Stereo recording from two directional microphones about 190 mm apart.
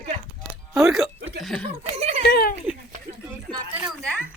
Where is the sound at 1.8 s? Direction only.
35° right (ahead or behind).